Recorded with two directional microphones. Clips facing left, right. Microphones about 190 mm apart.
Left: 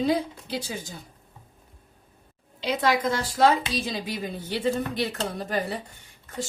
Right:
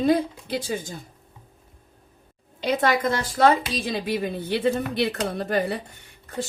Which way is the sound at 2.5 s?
50° right (ahead or behind).